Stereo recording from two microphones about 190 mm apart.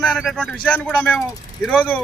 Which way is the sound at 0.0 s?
Centre (ahead or behind).